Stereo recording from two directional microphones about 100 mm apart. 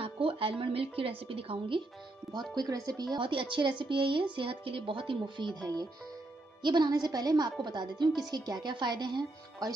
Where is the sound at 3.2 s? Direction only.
60° right (ahead or behind).